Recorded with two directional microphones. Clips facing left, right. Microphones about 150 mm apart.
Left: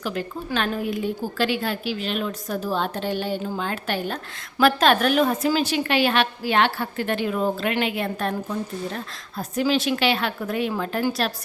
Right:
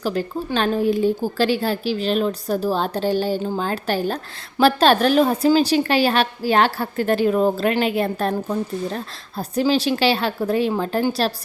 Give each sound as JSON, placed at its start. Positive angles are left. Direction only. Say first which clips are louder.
{"t": 0.0, "sound": "a woman's voice", "louder": "right 5 dB", "side_deg": -35}